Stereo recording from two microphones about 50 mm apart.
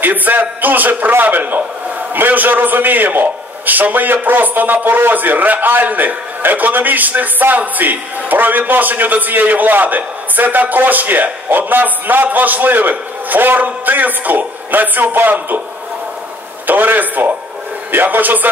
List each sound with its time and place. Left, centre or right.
0.0 s a man's voice: right
16.6 s a man's voice: right